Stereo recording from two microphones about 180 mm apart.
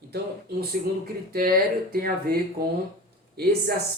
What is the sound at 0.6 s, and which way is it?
Speech, 55° right (ahead or behind).